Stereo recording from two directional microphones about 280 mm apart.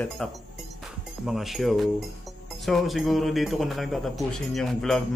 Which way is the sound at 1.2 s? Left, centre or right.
Centre.